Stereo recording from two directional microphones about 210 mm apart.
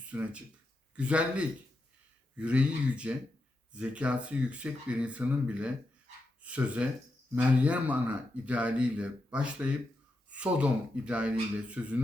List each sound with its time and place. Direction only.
0.1 s speech: 5° right (ahead or behind)